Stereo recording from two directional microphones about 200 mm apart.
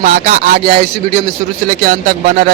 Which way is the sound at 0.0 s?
40° right (ahead or behind).